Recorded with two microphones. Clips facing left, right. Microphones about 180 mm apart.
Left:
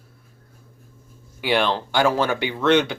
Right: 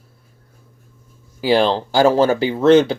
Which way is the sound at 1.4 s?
35° right (ahead or behind).